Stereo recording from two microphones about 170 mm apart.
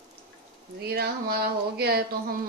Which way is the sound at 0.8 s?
70° right (ahead or behind).